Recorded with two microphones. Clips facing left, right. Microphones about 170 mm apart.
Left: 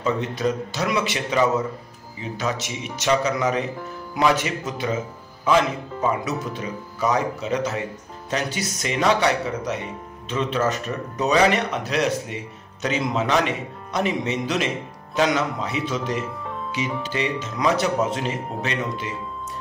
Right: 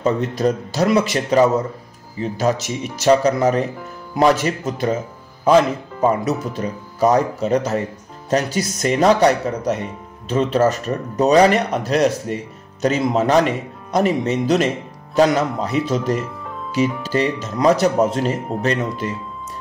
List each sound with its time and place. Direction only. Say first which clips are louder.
0.0 s speech: right 5 dB; 40° right (ahead or behind)
6.0 s speech: right 6 dB; 40° right (ahead or behind)